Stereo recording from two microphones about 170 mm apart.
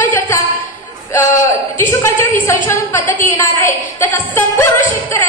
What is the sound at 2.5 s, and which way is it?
A woman's voice, 15° left (ahead or behind).